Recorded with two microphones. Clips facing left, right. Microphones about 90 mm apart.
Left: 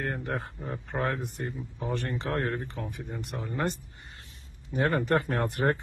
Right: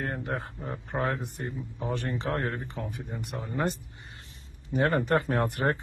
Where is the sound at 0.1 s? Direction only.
Centre (ahead or behind).